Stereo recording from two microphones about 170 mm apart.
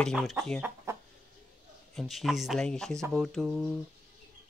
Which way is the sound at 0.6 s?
15° right (ahead or behind).